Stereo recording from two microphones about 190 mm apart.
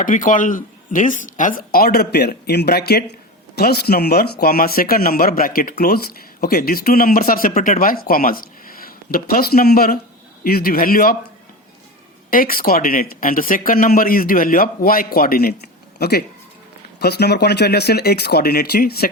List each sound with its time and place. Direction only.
0.0 s speech: 45° left (ahead or behind)
12.3 s speech: 50° left (ahead or behind)